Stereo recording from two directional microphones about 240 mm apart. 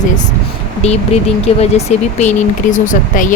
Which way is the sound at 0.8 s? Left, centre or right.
Left.